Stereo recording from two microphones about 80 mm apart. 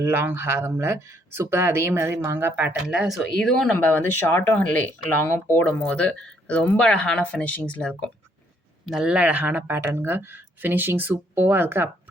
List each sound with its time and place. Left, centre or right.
0.0 s speech: right
2.9 s speech: centre
3.2 s speech: centre
3.8 s speech: left
8.9 s speech: centre; by 11.9 s right